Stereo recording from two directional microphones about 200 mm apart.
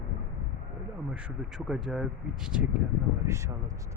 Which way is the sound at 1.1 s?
5° right (ahead or behind).